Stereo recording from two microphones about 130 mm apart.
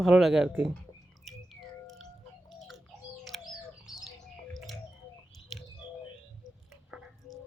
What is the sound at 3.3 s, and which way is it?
Chicken, centre (ahead or behind).